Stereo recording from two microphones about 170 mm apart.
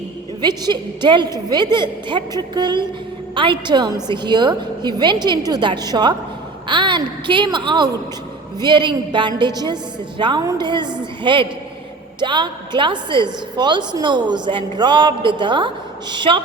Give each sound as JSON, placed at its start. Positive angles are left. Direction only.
{"t": 0.4, "sound": "a woman's voice", "side_deg": -25}